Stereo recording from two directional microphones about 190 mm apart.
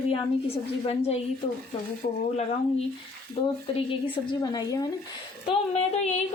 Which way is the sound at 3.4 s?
30° left (ahead or behind).